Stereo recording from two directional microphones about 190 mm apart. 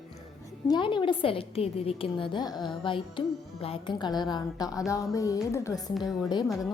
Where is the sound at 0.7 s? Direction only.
25° left (ahead or behind).